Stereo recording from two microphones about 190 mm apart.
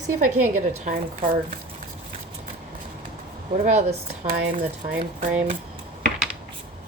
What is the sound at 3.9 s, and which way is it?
Speech, 60° right (ahead or behind).